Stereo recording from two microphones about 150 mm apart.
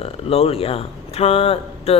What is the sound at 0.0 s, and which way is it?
Speech, 40° left (ahead or behind).